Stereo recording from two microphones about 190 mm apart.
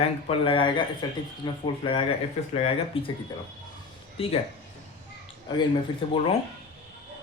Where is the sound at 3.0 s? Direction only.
30° left (ahead or behind).